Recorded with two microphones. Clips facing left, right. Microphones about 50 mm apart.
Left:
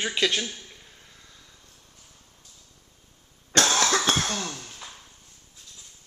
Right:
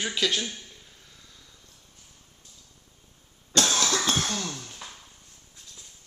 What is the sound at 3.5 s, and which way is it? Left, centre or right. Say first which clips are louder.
Cough: left 3 dB; left.